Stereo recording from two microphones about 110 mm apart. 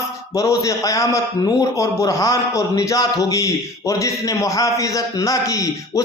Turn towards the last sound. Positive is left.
turn(degrees=30)  # may be behind; listen again after turning